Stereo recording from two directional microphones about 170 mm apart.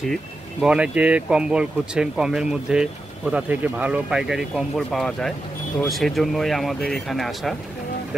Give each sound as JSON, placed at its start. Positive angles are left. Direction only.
{"t": 0.1, "sound": "speech", "side_deg": -5}